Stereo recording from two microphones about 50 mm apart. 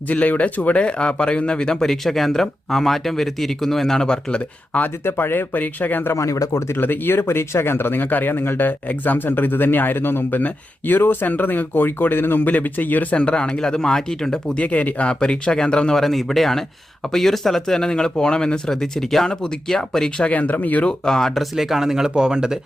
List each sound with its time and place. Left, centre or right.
0.1 s a man's voice: left
5.0 s speech: left
5.5 s speech: left
6.1 s speech: left
6.7 s speech: left; by 14.6 s centre
14.6 s speech: left
16.0 s a man's voice: centre
20.3 s speech: left
21.0 s a man's voice: centre
21.5 s speech: centre